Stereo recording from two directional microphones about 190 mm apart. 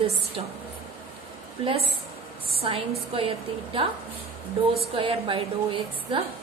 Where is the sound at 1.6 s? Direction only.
30° right (ahead or behind).